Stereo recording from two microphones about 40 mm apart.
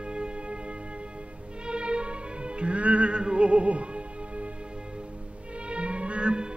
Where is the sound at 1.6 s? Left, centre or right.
Right.